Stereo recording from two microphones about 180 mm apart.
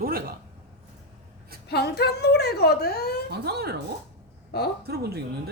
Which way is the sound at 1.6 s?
65° left (ahead or behind).